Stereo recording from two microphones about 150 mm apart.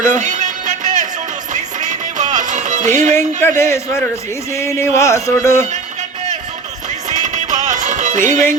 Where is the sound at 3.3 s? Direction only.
15° left (ahead or behind).